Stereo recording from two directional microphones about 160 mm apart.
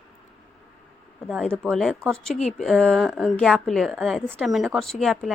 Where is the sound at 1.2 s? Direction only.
Centre (ahead or behind).